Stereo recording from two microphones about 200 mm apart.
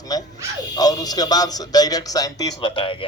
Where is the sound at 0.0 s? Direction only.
20° left (ahead or behind).